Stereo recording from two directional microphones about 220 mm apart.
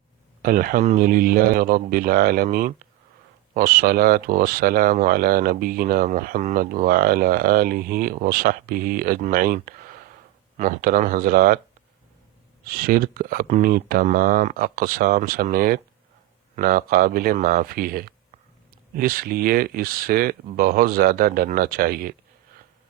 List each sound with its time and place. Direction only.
0.4 s speech: 40° right (ahead or behind)
12.6 s speech: 40° right (ahead or behind)